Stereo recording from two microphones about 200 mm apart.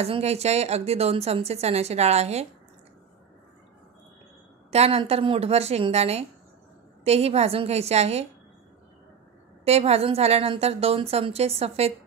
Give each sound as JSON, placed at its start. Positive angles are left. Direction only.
{"t": 0.0, "sound": "a woman's voice", "side_deg": -30}
{"t": 4.6, "sound": "a woman's voice", "side_deg": -30}
{"t": 9.7, "sound": "a woman's voice", "side_deg": -30}